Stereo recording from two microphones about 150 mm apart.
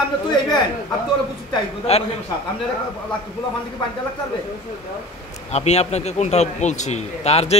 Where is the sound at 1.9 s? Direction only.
45° left (ahead or behind).